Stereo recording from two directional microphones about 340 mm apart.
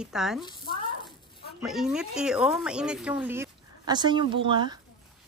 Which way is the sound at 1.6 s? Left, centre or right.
Centre.